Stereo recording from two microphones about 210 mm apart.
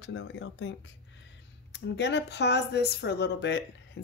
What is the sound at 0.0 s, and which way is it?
Speech, 65° left (ahead or behind).